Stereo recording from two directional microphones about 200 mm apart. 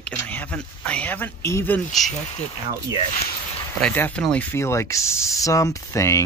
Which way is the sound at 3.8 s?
5° left (ahead or behind).